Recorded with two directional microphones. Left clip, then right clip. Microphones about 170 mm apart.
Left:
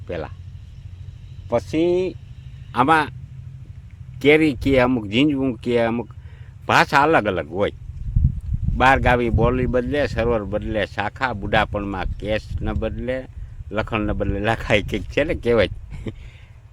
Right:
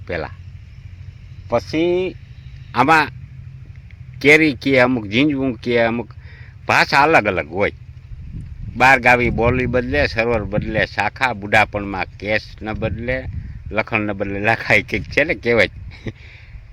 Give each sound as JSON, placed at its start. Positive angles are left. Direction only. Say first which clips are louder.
{"t": 0.1, "sound": "speech", "louder": "right 4 dB", "side_deg": -20}
{"t": 1.5, "sound": "speech", "louder": "right 2 dB", "side_deg": -10}
{"t": 4.2, "sound": "speech", "louder": "right 3 dB", "side_deg": 0}
{"t": 8.8, "sound": "speech", "louder": "right 4 dB", "side_deg": -5}